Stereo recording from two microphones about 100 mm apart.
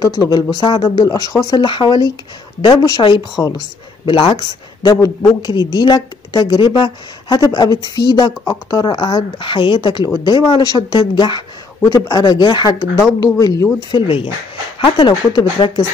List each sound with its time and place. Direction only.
0.0 s speech: 40° left (ahead or behind)
1.6 s a woman's voice: 50° left (ahead or behind)
3.4 s speech: 30° left (ahead or behind)
4.0 s speech: 55° left (ahead or behind)
4.8 s a woman's voice: 45° left (ahead or behind)
13.9 s speech: 60° left (ahead or behind)
14.8 s a woman's voice: 50° left (ahead or behind)